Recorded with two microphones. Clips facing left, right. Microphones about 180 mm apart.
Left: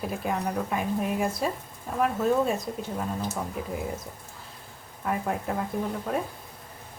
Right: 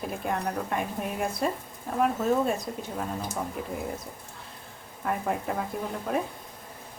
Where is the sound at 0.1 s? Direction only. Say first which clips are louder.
Even; centre (ahead or behind).